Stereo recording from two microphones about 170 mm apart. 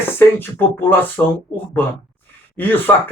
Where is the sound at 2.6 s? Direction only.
10° left (ahead or behind).